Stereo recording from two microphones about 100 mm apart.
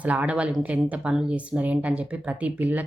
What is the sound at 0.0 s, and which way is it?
Speech, 15° right (ahead or behind).